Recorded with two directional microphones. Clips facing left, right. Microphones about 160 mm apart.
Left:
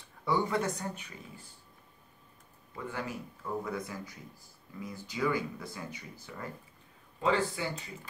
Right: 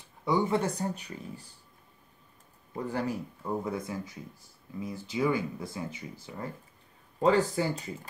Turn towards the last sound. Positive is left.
turn(degrees=-40)  # may be behind; listen again after turning